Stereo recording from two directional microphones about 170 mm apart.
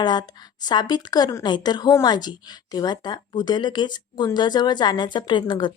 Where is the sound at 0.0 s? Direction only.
25° left (ahead or behind).